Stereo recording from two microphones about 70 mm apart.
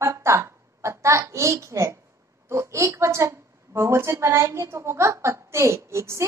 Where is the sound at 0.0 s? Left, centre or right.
Right.